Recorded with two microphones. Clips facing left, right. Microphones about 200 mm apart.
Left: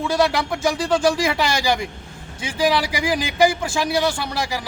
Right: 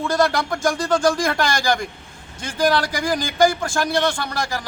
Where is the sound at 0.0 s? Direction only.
5° left (ahead or behind).